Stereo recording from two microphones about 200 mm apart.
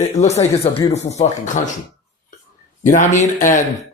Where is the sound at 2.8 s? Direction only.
40° left (ahead or behind).